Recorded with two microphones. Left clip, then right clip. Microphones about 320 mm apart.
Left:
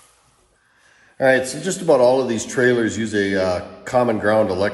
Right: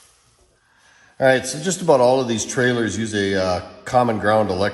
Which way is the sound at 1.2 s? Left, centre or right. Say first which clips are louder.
Even; right.